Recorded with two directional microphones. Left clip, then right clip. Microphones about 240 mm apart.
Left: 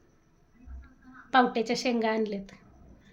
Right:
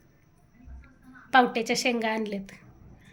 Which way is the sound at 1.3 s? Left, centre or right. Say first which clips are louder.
Right 2 dB; centre.